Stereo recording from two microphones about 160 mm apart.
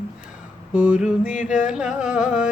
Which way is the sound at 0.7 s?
10° right (ahead or behind).